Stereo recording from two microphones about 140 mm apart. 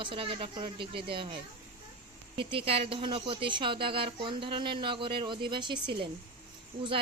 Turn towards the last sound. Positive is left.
turn(degrees=-35)  # may be behind; listen again after turning